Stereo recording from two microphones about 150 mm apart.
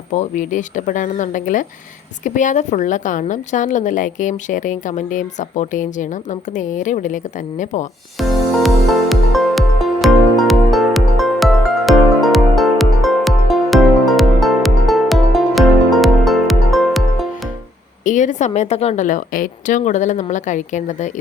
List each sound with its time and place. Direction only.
0.1 s a woman's voice: 55° left (ahead or behind)
8.2 s music: centre (ahead or behind)
18.0 s a woman's voice: 55° left (ahead or behind)